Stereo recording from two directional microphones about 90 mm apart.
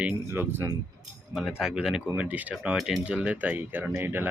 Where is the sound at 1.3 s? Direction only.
5° right (ahead or behind).